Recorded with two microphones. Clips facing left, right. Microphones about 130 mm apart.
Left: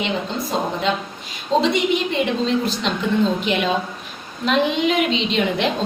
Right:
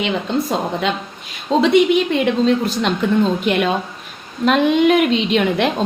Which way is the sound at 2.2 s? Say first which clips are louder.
Right 4 dB; 50° right (ahead or behind).